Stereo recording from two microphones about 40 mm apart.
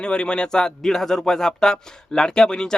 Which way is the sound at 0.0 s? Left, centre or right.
Left.